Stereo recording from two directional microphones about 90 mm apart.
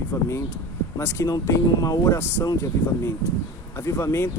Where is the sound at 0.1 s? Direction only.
30° left (ahead or behind).